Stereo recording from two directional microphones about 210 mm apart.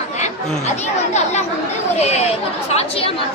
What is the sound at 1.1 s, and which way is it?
Speech, 35° left (ahead or behind).